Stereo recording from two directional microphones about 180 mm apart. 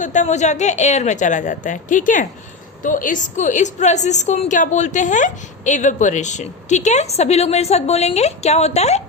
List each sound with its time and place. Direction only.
0.0 s a woman's voice: 45° left (ahead or behind)